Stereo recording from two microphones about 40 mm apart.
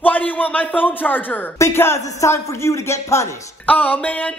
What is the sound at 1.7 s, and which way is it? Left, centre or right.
A man's voice, left.